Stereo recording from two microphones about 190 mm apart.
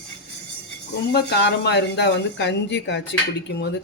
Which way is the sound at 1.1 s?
65° left (ahead or behind).